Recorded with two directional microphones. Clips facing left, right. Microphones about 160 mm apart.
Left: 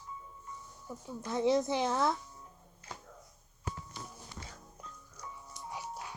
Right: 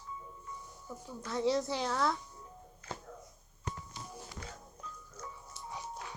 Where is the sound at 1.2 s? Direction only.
20° left (ahead or behind).